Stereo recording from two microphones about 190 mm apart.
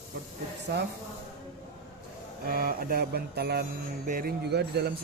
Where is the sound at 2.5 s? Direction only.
50° right (ahead or behind).